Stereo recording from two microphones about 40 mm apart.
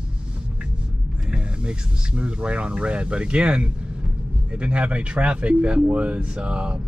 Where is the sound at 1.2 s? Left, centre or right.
Right.